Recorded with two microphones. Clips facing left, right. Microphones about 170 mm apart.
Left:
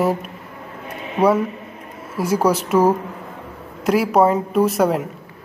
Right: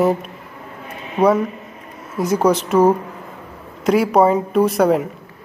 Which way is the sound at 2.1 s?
5° left (ahead or behind).